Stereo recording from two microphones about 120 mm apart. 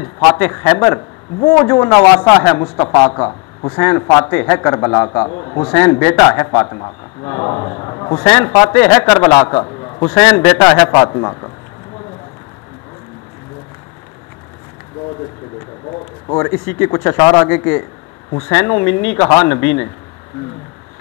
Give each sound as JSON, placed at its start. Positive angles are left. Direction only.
{"t": 0.0, "sound": "a man's voice", "side_deg": 15}
{"t": 5.8, "sound": "a man's voice", "side_deg": 20}
{"t": 9.6, "sound": "a sound", "side_deg": 35}
{"t": 10.0, "sound": "a man's voice", "side_deg": 15}
{"t": 10.9, "sound": "speech", "side_deg": 35}
{"t": 16.3, "sound": "a man's voice", "side_deg": 20}
{"t": 17.2, "sound": "speech", "side_deg": 30}
{"t": 17.5, "sound": "a man's voice", "side_deg": 20}